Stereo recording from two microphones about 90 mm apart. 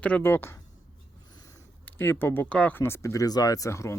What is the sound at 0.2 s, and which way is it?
Cutlery, 25° left (ahead or behind).